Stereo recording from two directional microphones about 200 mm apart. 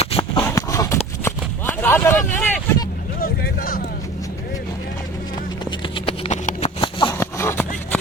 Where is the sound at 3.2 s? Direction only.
45° left (ahead or behind).